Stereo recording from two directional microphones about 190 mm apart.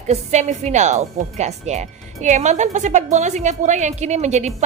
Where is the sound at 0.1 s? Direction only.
35° right (ahead or behind).